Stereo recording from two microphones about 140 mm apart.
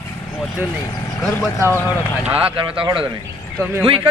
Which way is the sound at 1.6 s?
20° left (ahead or behind).